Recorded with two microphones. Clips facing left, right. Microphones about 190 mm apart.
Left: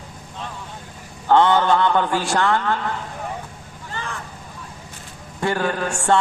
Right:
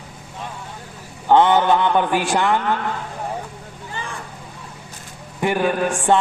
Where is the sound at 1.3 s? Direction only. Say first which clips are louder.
Right 1 dB; 15° right (ahead or behind).